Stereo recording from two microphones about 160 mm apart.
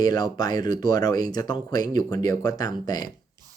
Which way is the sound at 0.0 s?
25° left (ahead or behind).